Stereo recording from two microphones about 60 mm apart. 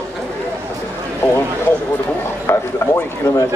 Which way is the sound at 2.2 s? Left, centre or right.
Left.